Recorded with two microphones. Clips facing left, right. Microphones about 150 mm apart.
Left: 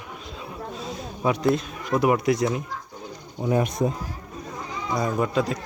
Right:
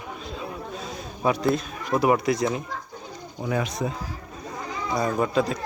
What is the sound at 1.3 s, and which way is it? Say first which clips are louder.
Speech: left 1 dB; 20° left (ahead or behind).